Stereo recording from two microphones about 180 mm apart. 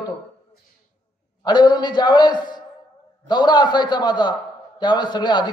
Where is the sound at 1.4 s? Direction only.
25° left (ahead or behind).